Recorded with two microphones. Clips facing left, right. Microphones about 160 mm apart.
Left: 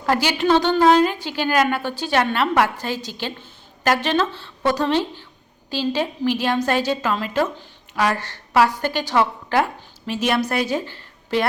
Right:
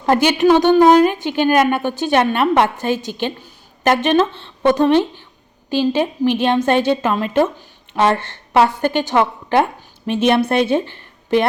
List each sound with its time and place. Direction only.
0.0 s a woman's voice: 20° right (ahead or behind)